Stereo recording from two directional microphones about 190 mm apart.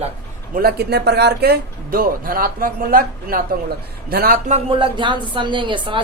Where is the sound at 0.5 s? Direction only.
55° right (ahead or behind).